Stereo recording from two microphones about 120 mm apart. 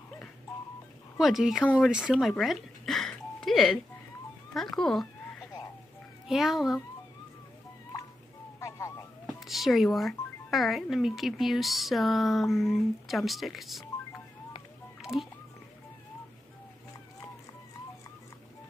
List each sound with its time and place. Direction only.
1.1 s speech: 5° right (ahead or behind)
1.8 s doorbell: 5° right (ahead or behind)
4.6 s speech: 5° left (ahead or behind)
6.2 s speech: centre (ahead or behind)
8.5 s vehicle: 25° left (ahead or behind)
9.2 s speech: centre (ahead or behind)
15.0 s a sound: 5° right (ahead or behind)